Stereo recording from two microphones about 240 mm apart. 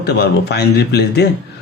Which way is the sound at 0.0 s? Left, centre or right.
Left.